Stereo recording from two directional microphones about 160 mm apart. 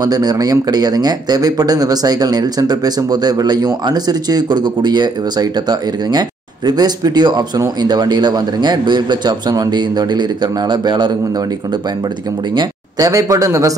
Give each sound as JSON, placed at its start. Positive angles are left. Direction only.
{"t": 0.0, "sound": "a man's voice", "side_deg": -25}
{"t": 12.5, "sound": "a man's voice", "side_deg": -20}